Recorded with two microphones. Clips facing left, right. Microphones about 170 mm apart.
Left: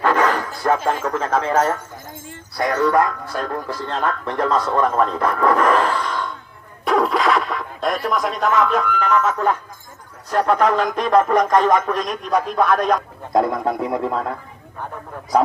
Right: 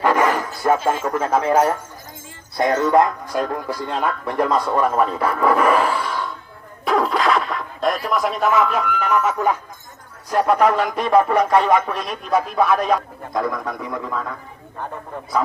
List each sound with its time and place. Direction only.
0.0 s bow-wow: 10° right (ahead or behind)
0.9 s speech: 10° right (ahead or behind)
6.8 s music: centre (ahead or behind)
10.2 s speech: 10° right (ahead or behind)
13.7 s speech: 55° left (ahead or behind)